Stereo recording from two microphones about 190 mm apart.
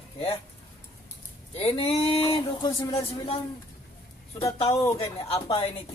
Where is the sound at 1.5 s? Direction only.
30° left (ahead or behind).